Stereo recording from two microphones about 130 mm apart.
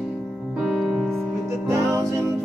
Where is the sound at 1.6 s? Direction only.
20° right (ahead or behind).